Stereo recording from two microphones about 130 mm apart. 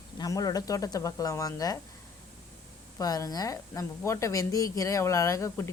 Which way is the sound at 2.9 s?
25° left (ahead or behind).